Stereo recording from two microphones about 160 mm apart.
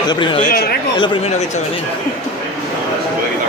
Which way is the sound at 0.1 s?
30° left (ahead or behind).